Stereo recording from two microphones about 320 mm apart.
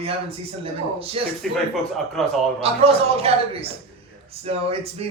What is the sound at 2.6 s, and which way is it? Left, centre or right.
A man's voice, centre.